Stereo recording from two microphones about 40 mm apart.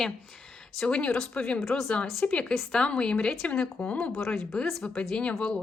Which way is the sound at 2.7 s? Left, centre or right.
Left.